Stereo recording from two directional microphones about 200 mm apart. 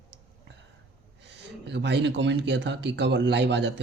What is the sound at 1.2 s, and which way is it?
Speech, 60° right (ahead or behind).